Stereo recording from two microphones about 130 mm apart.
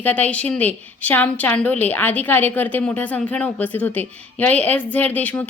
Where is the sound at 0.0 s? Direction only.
10° left (ahead or behind).